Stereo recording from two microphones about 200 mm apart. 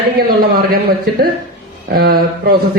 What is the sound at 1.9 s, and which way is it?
Speech, 50° right (ahead or behind).